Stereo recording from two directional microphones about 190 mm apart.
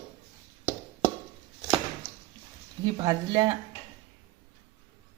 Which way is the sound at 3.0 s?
20° right (ahead or behind).